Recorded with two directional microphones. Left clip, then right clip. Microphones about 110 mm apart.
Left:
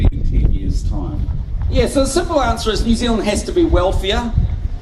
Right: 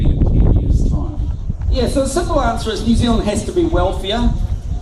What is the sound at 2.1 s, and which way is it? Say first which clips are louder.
A man's voice: left 1 dB; 25° left (ahead or behind).